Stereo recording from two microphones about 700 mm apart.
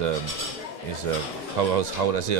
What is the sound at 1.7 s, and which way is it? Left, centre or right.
Speech, right.